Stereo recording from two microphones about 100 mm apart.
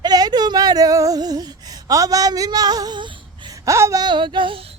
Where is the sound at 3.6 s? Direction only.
30° right (ahead or behind).